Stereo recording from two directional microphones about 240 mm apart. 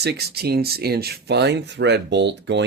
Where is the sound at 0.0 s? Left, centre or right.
Right.